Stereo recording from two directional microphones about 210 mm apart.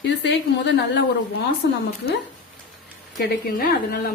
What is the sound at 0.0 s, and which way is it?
A woman's voice, 55° left (ahead or behind).